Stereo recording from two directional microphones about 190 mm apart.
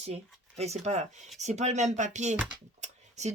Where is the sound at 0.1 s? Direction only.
35° right (ahead or behind).